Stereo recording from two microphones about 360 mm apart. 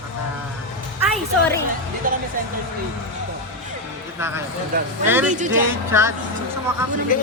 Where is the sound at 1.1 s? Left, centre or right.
Centre.